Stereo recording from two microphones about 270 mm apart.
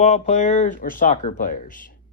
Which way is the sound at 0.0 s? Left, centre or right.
Left.